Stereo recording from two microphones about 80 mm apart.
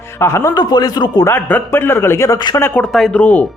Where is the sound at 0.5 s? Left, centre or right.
Left.